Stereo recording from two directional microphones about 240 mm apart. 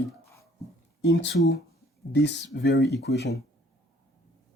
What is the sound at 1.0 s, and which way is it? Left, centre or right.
Speech, left.